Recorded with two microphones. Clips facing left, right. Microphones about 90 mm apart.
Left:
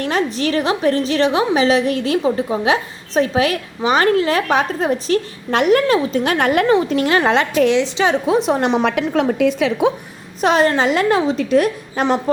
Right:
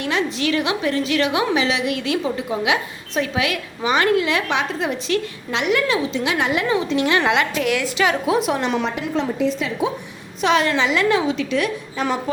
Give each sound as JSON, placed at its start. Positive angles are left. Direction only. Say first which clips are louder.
{"t": 0.0, "sound": "a woman's voice", "louder": "left 3 dB", "side_deg": 40}
{"t": 8.8, "sound": "a woman's voice", "louder": "left 6 dB", "side_deg": 70}
{"t": 10.4, "sound": "a woman's voice", "louder": "left 3 dB", "side_deg": 40}